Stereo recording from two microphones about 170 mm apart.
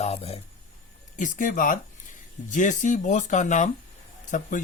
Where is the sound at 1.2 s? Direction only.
50° left (ahead or behind).